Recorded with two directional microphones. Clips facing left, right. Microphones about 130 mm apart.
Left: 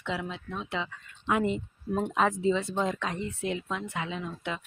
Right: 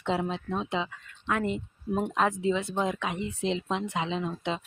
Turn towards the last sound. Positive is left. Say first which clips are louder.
# right 4 dB
turn(degrees=-25)  # may be behind; listen again after turning